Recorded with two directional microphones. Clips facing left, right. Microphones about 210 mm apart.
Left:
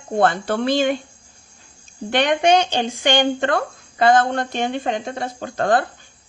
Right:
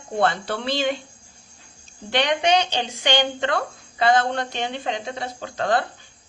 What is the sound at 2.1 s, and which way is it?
Speech, 50° left (ahead or behind).